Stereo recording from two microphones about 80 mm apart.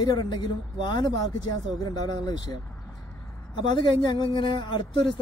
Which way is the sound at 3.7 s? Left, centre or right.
Left.